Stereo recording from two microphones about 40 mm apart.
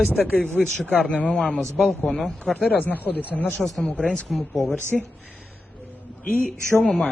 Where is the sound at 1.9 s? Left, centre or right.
Centre.